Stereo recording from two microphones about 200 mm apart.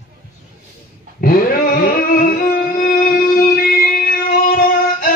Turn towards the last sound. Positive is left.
turn(degrees=45)  # may be behind; listen again after turning